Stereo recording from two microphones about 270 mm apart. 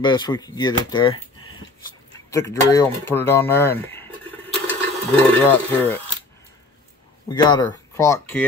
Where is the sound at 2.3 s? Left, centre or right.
Centre.